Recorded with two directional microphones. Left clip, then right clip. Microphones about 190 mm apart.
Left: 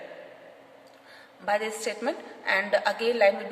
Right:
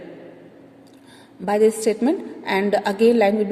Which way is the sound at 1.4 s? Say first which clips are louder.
Right 10 dB; 45° right (ahead or behind).